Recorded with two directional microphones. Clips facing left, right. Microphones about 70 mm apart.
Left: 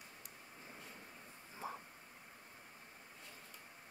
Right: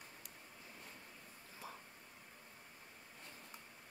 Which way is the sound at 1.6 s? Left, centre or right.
Left.